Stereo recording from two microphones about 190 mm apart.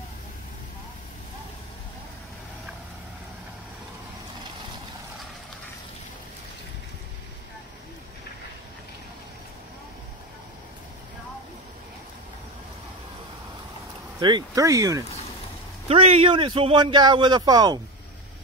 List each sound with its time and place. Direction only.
14.2 s speech: 20° right (ahead or behind)
15.9 s speech: 30° right (ahead or behind)